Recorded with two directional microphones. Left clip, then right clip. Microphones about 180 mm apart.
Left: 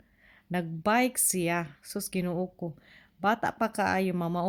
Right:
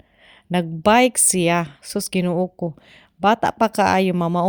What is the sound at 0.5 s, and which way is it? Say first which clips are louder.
Speech: right 11 dB; 45° right (ahead or behind).